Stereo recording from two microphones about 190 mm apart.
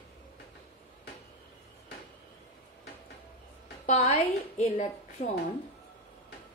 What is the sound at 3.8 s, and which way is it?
A woman's voice, 35° left (ahead or behind).